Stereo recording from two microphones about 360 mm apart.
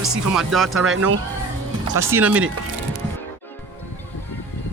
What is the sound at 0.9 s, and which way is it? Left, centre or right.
Speech, right.